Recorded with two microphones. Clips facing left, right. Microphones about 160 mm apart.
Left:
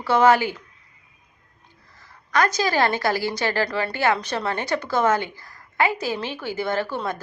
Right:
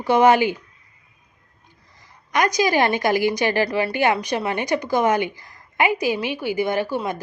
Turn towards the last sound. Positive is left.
turn(degrees=-10)  # may be behind; listen again after turning